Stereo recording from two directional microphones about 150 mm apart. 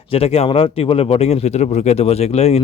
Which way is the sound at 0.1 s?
40° left (ahead or behind).